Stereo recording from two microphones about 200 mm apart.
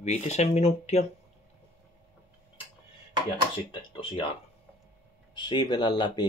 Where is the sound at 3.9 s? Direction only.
25° left (ahead or behind).